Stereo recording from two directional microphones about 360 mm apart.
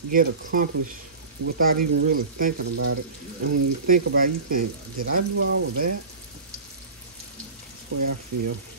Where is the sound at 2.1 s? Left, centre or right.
Right.